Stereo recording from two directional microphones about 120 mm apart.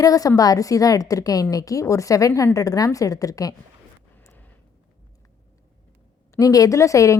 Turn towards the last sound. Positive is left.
turn(degrees=25)  # may be behind; listen again after turning